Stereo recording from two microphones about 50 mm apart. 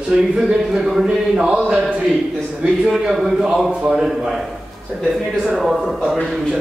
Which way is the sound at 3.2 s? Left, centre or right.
Centre.